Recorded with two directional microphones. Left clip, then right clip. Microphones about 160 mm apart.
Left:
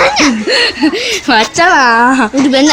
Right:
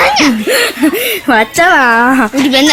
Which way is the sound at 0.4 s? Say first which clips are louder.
Even; 30° right (ahead or behind).